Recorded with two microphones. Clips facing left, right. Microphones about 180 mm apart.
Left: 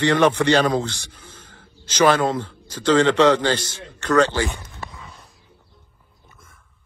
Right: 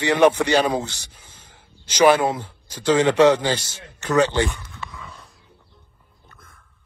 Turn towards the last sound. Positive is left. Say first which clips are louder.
# even
turn(degrees=35)  # may be behind; listen again after turning